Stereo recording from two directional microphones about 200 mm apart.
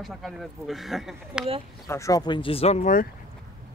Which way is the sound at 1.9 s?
15° left (ahead or behind).